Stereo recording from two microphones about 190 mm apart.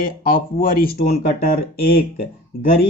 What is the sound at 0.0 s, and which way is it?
Speech, 45° left (ahead or behind).